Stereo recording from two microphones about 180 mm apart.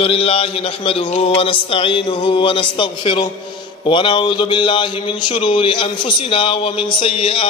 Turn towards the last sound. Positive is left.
turn(degrees=30)  # may be behind; listen again after turning